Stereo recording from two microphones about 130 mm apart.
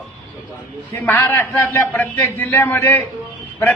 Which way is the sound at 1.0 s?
15° left (ahead or behind).